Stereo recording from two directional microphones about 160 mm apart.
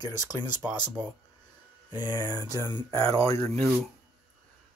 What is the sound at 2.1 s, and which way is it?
Speech, 20° left (ahead or behind).